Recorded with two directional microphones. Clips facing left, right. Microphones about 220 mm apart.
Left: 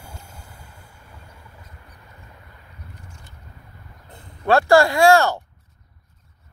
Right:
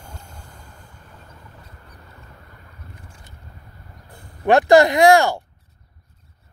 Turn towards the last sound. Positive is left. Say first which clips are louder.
# right 2 dB
turn(degrees=-15)  # may be behind; listen again after turning